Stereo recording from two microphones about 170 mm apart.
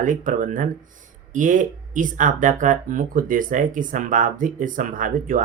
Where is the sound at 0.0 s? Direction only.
50° right (ahead or behind).